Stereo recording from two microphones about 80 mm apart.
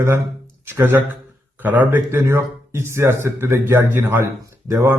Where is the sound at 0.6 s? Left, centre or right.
Right.